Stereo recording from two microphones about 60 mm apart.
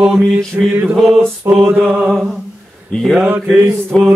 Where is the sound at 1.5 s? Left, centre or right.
Right.